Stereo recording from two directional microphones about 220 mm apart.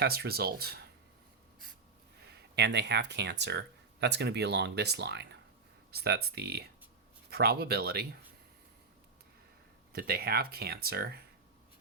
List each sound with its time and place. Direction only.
0.0 s speech: 45° right (ahead or behind)
2.6 s speech: 50° right (ahead or behind)
9.9 s speech: 45° right (ahead or behind)